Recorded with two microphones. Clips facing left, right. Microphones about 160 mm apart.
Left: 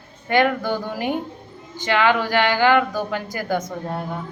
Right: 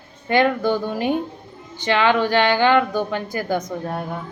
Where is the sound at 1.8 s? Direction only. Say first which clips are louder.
Right 1 dB; 20° right (ahead or behind).